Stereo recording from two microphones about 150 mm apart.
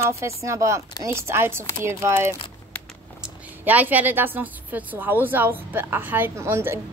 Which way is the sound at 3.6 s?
10° right (ahead or behind).